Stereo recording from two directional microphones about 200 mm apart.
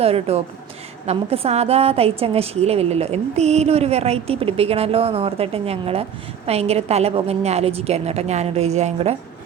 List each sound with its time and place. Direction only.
0.0 s a woman's voice: 30° right (ahead or behind)